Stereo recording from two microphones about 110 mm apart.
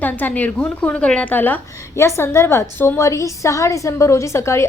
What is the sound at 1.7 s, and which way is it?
A woman's voice, 25° left (ahead or behind).